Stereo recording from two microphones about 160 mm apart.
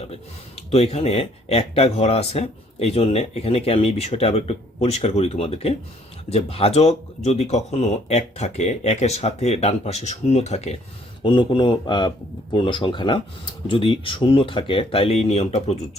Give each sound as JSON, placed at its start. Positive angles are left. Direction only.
{"t": 0.7, "sound": "speech", "side_deg": 40}
{"t": 11.2, "sound": "speech", "side_deg": 30}